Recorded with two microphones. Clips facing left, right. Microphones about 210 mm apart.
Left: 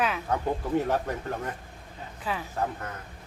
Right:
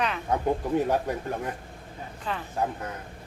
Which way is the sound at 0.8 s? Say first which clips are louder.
Right 2 dB; 15° right (ahead or behind).